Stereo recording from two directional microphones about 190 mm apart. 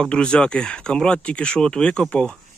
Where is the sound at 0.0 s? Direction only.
5° left (ahead or behind).